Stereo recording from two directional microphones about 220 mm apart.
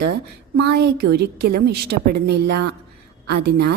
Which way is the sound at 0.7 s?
50° right (ahead or behind).